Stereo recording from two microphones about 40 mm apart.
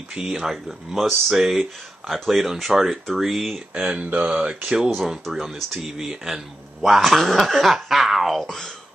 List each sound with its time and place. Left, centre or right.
0.2 s speech: centre
0.5 s a man's voice: centre
3.5 s speech: right
4.3 s speech: right
5.3 s a man's voice: centre
8.5 s speech: centre